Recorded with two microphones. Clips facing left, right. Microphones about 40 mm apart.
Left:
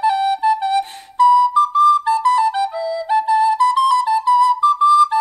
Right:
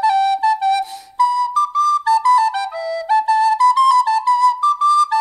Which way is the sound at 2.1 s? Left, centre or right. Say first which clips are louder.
Right 2 dB; left.